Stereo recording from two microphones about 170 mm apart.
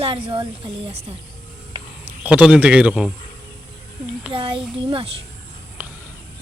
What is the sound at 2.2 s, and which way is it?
Speech, 5° right (ahead or behind).